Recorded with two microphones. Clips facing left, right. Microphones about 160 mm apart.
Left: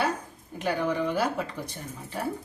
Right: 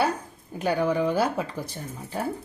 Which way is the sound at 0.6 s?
35° right (ahead or behind).